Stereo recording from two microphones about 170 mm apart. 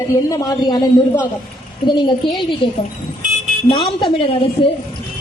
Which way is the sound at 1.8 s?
25° left (ahead or behind).